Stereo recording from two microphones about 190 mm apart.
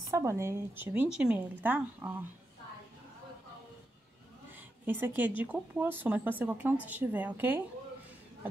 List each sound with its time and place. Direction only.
0.1 s speech: 15° right (ahead or behind)
4.6 s speech: 10° right (ahead or behind)